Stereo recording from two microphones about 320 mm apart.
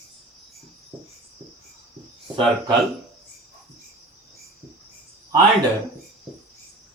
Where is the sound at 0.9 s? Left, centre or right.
Centre.